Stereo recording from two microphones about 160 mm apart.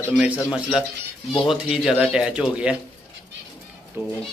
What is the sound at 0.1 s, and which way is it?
A man's voice, 5° right (ahead or behind).